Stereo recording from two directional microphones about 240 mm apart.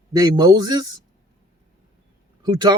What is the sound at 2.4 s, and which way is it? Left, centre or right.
Speech, centre.